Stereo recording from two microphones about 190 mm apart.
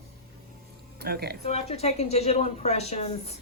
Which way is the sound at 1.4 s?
35° left (ahead or behind).